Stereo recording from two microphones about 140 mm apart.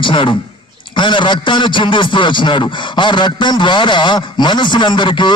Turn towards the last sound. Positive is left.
turn(degrees=35)  # may be behind; listen again after turning